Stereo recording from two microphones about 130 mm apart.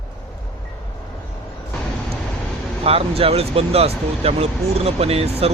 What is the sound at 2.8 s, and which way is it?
Speech, 50° right (ahead or behind).